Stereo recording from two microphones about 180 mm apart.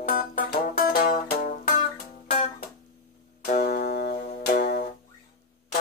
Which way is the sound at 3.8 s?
45° left (ahead or behind).